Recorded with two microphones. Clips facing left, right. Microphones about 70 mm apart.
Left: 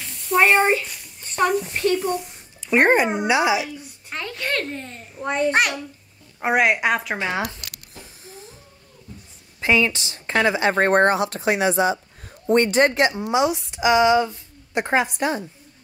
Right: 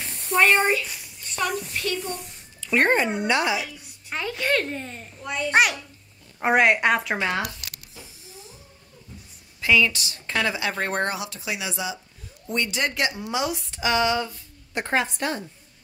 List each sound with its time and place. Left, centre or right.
0.0 s a sound: right
0.5 s speech: left
1.2 s a sound: left
1.7 s speech: left
2.6 s speech: centre
4.1 s a child's voice: centre
5.2 s speech: left
5.5 s speech: centre
9.6 s speech: left